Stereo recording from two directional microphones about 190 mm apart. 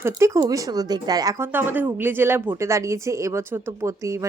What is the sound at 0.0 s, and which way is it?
Speech, 15° right (ahead or behind).